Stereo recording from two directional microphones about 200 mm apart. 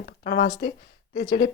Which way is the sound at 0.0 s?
55° left (ahead or behind).